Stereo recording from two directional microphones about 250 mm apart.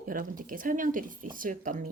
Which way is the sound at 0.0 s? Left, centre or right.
Right.